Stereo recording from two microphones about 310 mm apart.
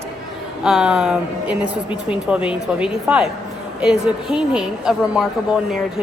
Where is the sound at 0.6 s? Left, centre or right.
Centre.